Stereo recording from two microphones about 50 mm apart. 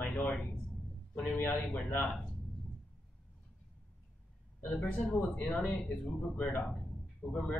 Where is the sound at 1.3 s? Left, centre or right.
Left.